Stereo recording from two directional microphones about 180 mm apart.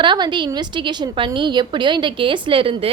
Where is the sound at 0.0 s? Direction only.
25° right (ahead or behind).